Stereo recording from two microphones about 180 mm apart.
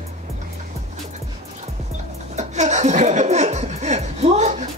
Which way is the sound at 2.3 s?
40° right (ahead or behind).